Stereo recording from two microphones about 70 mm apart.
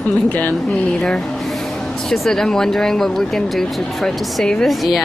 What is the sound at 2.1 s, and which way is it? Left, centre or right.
Speech, centre.